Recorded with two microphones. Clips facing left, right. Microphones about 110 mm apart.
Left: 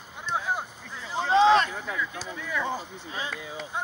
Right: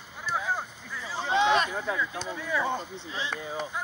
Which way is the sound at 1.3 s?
35° left (ahead or behind).